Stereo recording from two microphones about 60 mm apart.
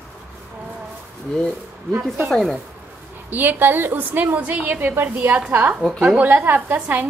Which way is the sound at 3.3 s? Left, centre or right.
Right.